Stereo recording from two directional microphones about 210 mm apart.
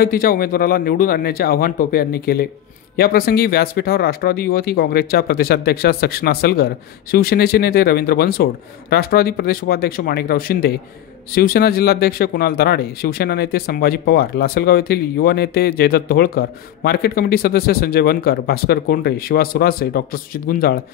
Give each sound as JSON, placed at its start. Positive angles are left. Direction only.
{"t": 0.0, "sound": "speech", "side_deg": 45}